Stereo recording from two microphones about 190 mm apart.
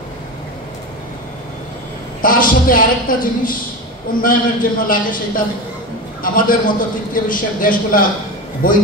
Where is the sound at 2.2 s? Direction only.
45° left (ahead or behind).